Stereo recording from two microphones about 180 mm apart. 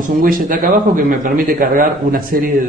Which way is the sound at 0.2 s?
50° right (ahead or behind).